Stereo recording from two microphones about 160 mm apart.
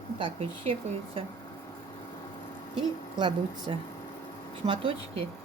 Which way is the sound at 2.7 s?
30° right (ahead or behind).